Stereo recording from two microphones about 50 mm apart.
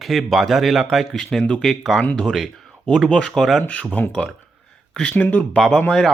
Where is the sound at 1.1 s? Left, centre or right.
Centre.